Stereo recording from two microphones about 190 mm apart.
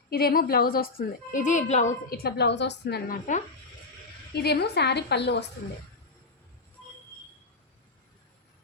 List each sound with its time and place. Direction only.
0.1 s a woman's voice: 50° left (ahead or behind)
2.0 s a woman's voice: 55° left (ahead or behind)
4.4 s a woman's voice: 60° left (ahead or behind)